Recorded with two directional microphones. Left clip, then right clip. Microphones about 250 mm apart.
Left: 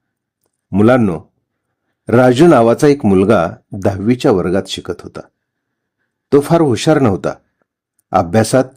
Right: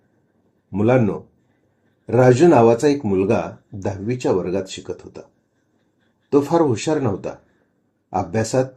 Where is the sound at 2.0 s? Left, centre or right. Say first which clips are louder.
Left 4 dB; left.